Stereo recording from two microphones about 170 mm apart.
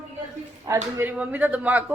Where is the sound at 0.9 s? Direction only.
10° right (ahead or behind).